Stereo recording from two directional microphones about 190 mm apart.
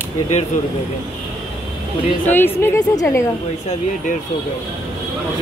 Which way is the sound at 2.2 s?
10° left (ahead or behind).